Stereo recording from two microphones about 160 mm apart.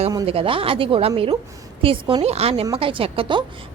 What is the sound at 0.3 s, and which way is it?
A woman's voice, 35° right (ahead or behind).